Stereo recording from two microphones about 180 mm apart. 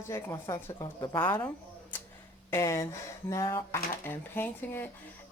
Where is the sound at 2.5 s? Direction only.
15° left (ahead or behind).